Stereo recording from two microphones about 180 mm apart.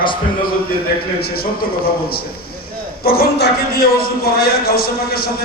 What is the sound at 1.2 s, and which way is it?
A man's voice, 55° left (ahead or behind).